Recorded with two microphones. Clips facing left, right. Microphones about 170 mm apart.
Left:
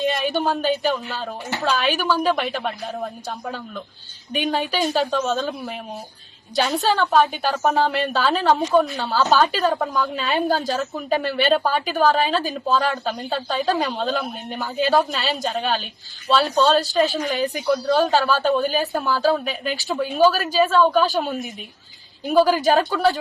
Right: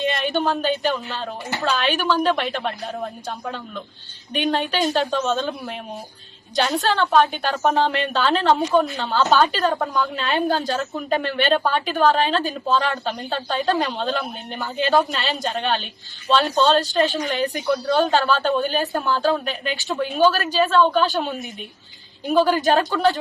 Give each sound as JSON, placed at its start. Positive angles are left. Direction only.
{"t": 0.0, "sound": "a woman's voice", "side_deg": 5}